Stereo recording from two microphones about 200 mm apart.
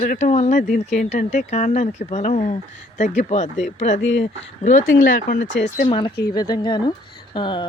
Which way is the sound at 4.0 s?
65° left (ahead or behind).